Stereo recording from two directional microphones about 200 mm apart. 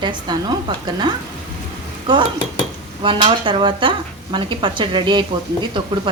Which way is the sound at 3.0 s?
25° right (ahead or behind).